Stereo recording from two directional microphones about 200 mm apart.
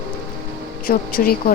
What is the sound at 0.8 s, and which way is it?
Speech, 45° left (ahead or behind).